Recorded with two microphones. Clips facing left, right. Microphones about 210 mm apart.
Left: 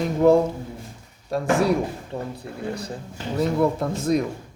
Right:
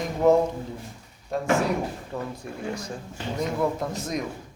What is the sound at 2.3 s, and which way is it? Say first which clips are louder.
Speech: left 2 dB; 35° left (ahead or behind).